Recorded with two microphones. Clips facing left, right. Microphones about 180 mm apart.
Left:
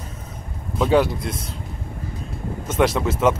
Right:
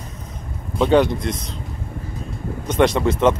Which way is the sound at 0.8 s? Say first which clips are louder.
Right 2 dB; 5° left (ahead or behind).